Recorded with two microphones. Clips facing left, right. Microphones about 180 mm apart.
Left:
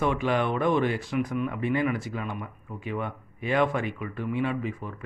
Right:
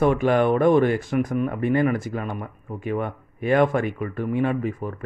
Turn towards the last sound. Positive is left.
turn(degrees=-50)  # may be behind; listen again after turning